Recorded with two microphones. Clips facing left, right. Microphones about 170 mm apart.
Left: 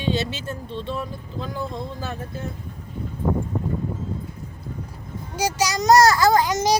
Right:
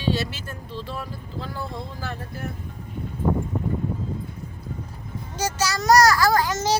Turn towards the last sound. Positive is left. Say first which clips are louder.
# left 3 dB
turn(degrees=15)  # may be behind; listen again after turning